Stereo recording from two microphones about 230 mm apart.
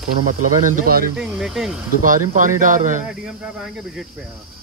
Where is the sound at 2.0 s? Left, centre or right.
Right.